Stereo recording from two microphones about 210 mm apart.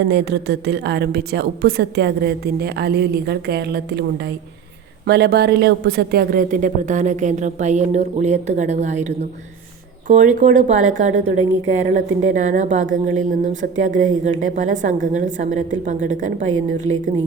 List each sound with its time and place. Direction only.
0.0 s a woman's voice: 55° right (ahead or behind)
5.0 s a woman's voice: 50° right (ahead or behind)